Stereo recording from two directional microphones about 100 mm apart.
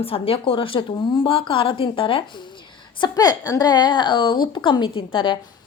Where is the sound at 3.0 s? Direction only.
40° left (ahead or behind).